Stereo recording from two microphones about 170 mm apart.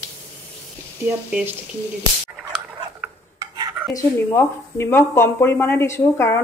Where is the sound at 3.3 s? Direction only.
25° right (ahead or behind).